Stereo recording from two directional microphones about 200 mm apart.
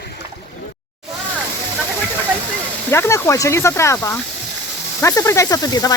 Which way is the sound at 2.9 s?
15° left (ahead or behind).